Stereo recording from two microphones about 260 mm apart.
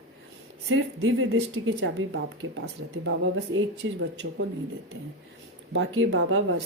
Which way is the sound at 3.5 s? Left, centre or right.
Right.